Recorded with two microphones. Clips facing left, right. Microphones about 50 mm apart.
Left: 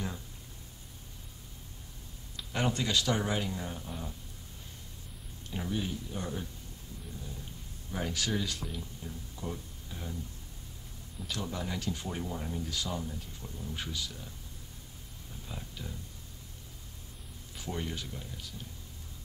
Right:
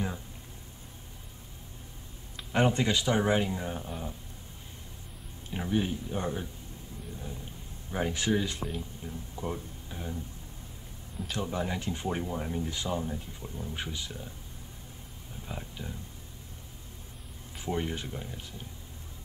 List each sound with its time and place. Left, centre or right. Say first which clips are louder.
2.3 s speech: right 6 dB; right
5.5 s speech: right 5 dB; right
7.9 s speech: right 5 dB; right
9.3 s a sound: right 5 dB; right
11.2 s speech: right 4 dB; right
15.4 s a sound: right 4 dB; right
17.6 s speech: right 5 dB; right